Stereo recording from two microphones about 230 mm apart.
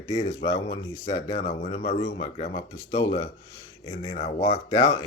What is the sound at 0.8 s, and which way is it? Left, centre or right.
Speech, centre.